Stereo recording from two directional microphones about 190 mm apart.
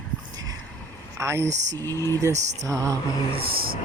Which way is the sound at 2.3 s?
35° right (ahead or behind).